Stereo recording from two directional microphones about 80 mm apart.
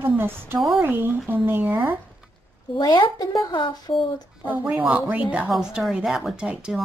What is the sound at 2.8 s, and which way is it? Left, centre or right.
Speech, left.